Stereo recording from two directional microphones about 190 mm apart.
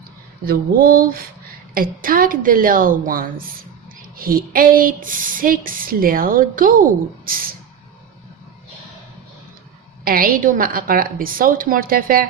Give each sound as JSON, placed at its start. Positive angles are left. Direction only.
{"t": 0.4, "sound": "speech", "side_deg": -50}
{"t": 10.0, "sound": "speech", "side_deg": -50}